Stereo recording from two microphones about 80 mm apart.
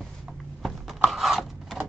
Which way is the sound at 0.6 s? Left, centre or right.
Centre.